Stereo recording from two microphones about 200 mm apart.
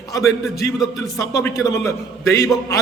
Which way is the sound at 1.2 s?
15° left (ahead or behind).